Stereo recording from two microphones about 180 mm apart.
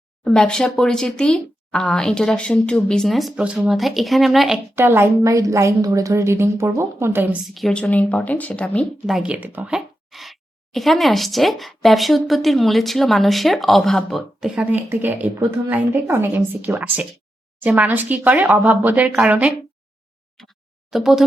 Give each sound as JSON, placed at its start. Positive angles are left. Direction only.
{"t": 0.3, "sound": "speech", "side_deg": 5}
{"t": 4.7, "sound": "a woman's voice", "side_deg": -15}
{"t": 7.4, "sound": "a woman's voice", "side_deg": 0}
{"t": 20.9, "sound": "speech", "side_deg": 0}